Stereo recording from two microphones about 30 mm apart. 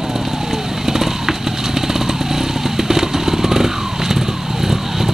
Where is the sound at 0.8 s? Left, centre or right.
Centre.